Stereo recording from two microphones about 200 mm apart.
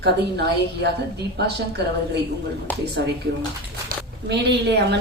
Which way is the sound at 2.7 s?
10° left (ahead or behind).